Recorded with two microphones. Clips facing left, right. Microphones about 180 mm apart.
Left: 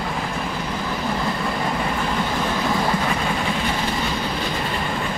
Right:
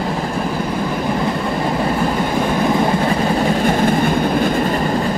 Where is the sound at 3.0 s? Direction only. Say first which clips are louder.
Right 7 dB; 45° right (ahead or behind).